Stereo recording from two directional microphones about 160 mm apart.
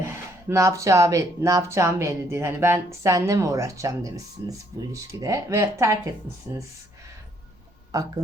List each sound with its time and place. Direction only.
0.0 s speech: 20° right (ahead or behind)
7.9 s speech: 20° right (ahead or behind)